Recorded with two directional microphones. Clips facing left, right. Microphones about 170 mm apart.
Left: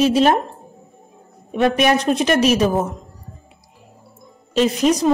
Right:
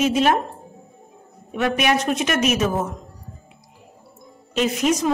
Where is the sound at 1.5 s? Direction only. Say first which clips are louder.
Left 4 dB; 35° left (ahead or behind).